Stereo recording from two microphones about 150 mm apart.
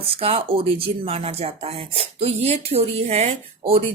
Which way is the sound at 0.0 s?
40° right (ahead or behind).